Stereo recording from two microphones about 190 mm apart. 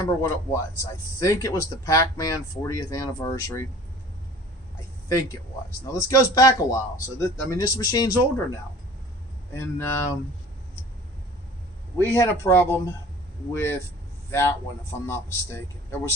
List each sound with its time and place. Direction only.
0.0 s speech: 15° left (ahead or behind)
5.9 s speech: 15° left (ahead or behind)
9.5 s speech: 10° left (ahead or behind)
11.9 s a man's voice: 15° left (ahead or behind)